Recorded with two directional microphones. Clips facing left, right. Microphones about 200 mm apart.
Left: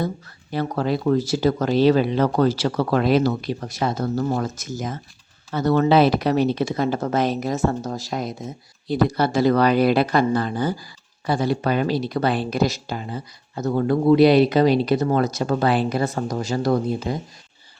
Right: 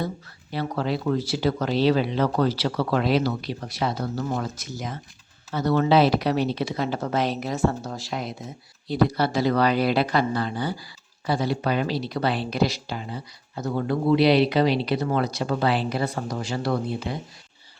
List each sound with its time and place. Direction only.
0.5 s speech: 45° left (ahead or behind)